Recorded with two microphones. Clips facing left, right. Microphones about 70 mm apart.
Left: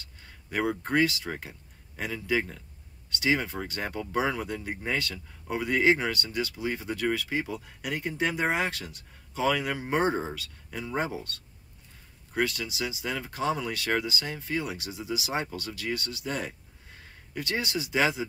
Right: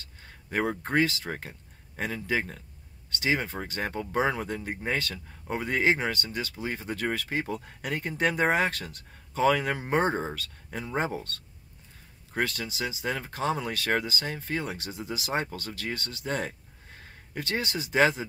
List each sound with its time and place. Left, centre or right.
0.2 s speech: right